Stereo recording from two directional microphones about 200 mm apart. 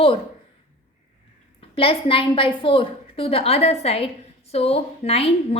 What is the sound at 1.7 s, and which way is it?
A woman's voice, 25° left (ahead or behind).